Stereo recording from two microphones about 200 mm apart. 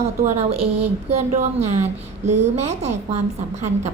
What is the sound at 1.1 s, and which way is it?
A woman's voice, 30° right (ahead or behind).